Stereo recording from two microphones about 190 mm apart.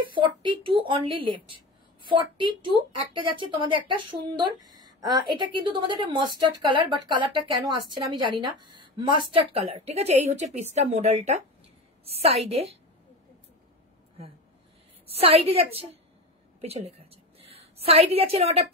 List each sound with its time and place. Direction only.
0.1 s a woman's voice: 25° right (ahead or behind)
15.0 s a woman's voice: 30° right (ahead or behind)